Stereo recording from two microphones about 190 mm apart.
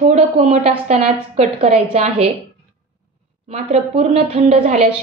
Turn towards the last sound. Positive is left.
turn(degrees=-35)  # may be behind; listen again after turning